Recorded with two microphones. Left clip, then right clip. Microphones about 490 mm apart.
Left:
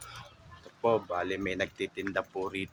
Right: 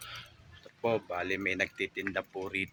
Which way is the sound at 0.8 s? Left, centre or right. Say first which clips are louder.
Left 3 dB; right.